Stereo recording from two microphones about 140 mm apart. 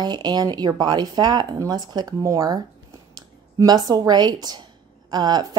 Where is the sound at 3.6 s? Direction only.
30° right (ahead or behind).